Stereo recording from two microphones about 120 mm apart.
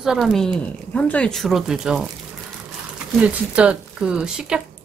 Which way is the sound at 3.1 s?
10° right (ahead or behind).